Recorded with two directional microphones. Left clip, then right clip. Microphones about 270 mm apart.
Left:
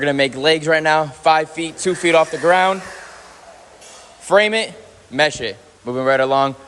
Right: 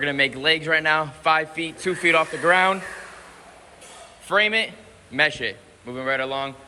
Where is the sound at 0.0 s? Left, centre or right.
Centre.